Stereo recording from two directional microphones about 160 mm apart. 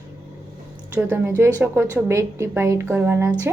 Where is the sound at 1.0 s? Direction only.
5° right (ahead or behind).